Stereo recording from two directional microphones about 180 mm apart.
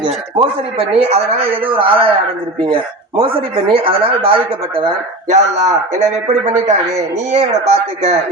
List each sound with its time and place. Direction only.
0.0 s a man's voice: 30° right (ahead or behind)
3.7 s a man's voice: 30° right (ahead or behind)